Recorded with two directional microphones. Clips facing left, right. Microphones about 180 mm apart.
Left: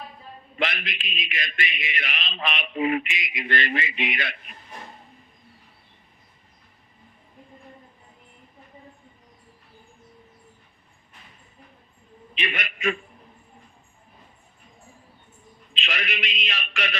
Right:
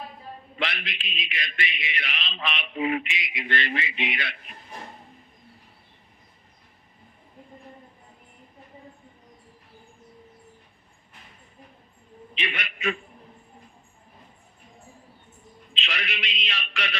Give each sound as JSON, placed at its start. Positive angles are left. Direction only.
{"t": 0.6, "sound": "a man's voice", "side_deg": 45}
{"t": 12.4, "sound": "a man's voice", "side_deg": 45}
{"t": 15.7, "sound": "a man's voice", "side_deg": 50}